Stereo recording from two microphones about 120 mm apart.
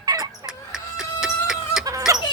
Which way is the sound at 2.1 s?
25° right (ahead or behind).